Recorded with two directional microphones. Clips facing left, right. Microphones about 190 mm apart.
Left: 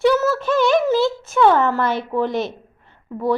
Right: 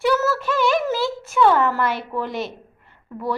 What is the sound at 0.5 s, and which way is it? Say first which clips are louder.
Speech: left 5 dB; 5° right (ahead or behind).